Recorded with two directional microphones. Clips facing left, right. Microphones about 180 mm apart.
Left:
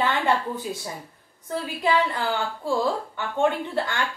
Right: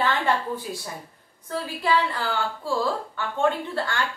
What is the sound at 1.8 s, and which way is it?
A woman's voice, 20° left (ahead or behind).